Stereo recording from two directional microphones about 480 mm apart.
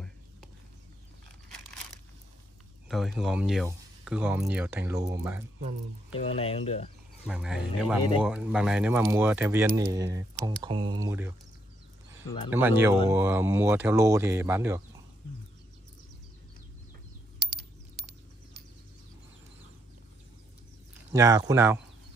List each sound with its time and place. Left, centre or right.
2.9 s speech: centre
6.1 s speech: centre
7.2 s speech: centre
12.4 s speech: centre
17.4 s a sound: right
21.1 s speech: centre